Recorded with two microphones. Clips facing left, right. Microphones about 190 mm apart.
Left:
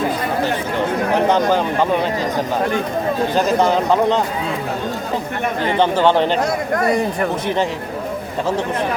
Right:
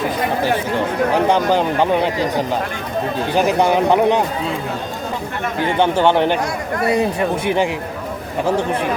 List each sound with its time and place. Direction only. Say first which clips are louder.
1.3 s speech: even; 15° right (ahead or behind)
3.3 s speech: right 2 dB; 15° right (ahead or behind)
5.8 s speech: even; 15° right (ahead or behind)
7.4 s speech: right 3 dB; 15° right (ahead or behind)